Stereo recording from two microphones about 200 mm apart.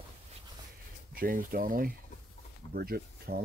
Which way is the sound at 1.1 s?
45° right (ahead or behind).